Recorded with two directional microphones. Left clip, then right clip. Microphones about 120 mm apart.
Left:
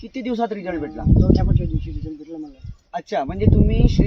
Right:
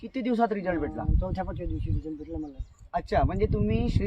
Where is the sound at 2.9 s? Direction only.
5° left (ahead or behind).